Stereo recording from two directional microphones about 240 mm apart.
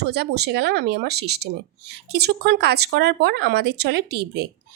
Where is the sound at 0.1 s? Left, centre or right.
Right.